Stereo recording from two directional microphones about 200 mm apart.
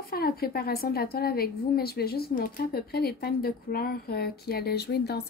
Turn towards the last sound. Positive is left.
turn(degrees=55)  # may be behind; listen again after turning